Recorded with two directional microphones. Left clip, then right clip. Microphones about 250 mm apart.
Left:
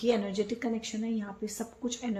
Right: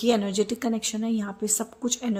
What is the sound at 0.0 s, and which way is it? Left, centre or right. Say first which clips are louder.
Speech: right 5 dB; right.